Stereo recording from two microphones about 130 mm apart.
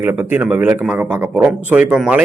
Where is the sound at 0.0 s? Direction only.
15° right (ahead or behind).